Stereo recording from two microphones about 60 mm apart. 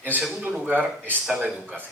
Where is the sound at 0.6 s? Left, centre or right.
Right.